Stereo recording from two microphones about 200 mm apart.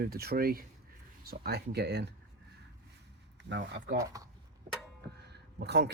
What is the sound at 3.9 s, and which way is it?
Speech, 15° right (ahead or behind).